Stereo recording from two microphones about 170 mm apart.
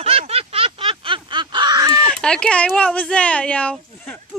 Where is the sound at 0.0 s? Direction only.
35° right (ahead or behind).